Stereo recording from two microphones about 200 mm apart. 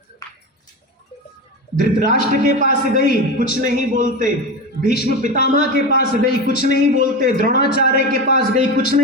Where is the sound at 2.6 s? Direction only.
55° left (ahead or behind).